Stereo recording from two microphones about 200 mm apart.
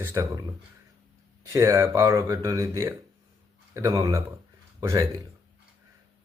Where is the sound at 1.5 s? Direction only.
15° right (ahead or behind).